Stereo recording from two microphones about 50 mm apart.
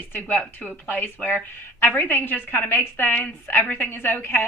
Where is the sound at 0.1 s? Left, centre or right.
Left.